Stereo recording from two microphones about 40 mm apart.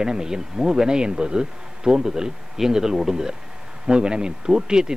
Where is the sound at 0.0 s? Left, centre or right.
Centre.